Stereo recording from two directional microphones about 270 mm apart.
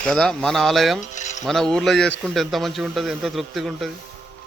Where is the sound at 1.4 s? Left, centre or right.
Centre.